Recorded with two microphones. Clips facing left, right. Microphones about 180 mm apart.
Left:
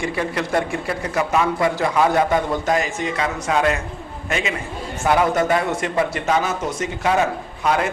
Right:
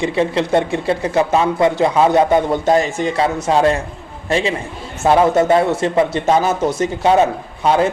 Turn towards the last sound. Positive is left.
turn(degrees=-30)  # may be behind; listen again after turning